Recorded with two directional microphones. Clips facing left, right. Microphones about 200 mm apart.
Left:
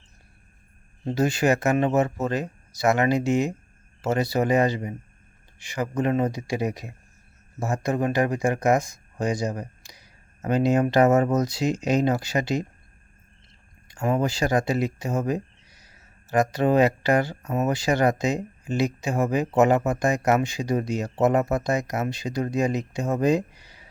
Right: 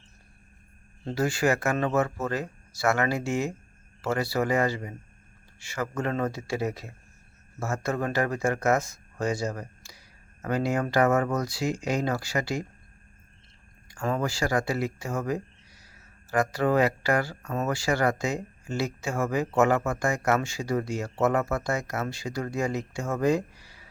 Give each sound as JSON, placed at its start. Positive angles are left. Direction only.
{"t": 1.0, "sound": "speech", "side_deg": 20}
{"t": 13.8, "sound": "speech", "side_deg": 20}